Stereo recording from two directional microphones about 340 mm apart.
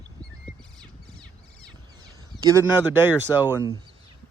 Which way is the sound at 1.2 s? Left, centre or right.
Centre.